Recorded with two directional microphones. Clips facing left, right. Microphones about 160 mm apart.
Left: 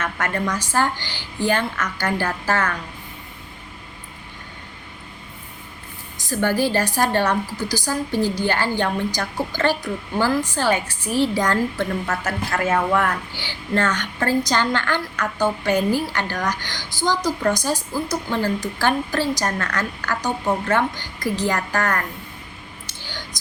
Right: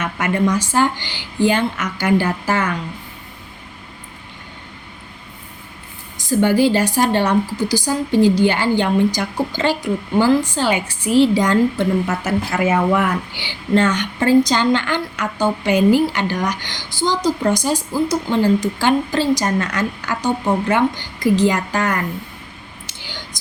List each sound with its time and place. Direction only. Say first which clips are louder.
0.0 s a woman's voice: right 6 dB; 15° right (ahead or behind)
6.4 s a woman's voice: right 5 dB; 15° right (ahead or behind)